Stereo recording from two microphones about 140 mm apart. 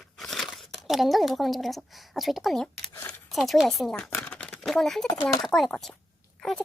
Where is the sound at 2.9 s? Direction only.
15° left (ahead or behind).